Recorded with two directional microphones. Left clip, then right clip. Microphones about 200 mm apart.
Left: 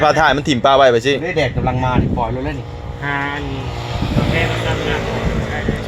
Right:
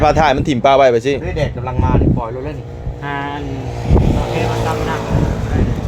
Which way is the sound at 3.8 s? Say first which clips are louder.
Right 4 dB; 55° right (ahead or behind).